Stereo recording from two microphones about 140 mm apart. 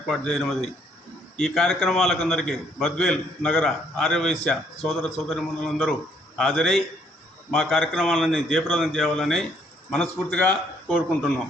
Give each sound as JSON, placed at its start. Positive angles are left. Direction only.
{"t": 0.1, "sound": "a man's voice", "side_deg": 0}